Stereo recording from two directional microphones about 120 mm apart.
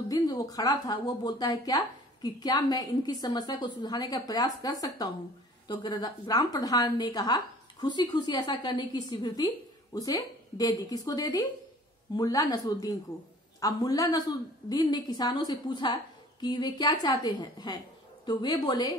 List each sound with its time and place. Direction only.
0.1 s a woman's voice: 35° left (ahead or behind)